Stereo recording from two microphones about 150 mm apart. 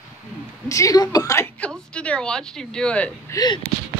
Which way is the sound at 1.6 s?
10° left (ahead or behind).